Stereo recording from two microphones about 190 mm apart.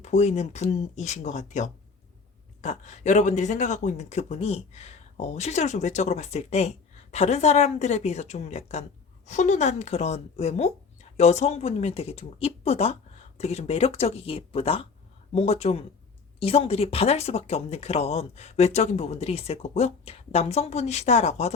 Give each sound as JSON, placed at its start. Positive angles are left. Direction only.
{"t": 0.0, "sound": "speech", "side_deg": 35}